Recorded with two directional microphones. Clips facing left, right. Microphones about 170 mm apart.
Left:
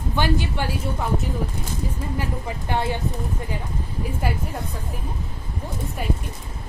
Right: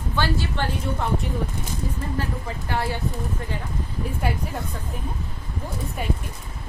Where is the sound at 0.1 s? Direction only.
15° left (ahead or behind).